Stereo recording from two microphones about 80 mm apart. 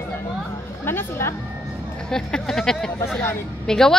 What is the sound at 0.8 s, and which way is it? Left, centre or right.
Speech, left.